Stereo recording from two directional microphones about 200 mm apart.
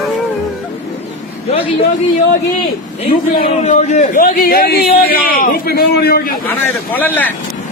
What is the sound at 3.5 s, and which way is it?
A man's voice, 35° left (ahead or behind).